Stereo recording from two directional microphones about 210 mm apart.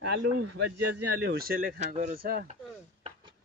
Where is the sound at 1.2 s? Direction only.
45° right (ahead or behind).